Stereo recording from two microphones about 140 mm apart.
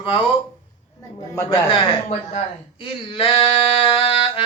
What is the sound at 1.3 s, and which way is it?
Speech, 20° left (ahead or behind).